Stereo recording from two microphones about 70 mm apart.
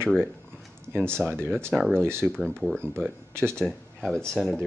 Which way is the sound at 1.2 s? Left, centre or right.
Centre.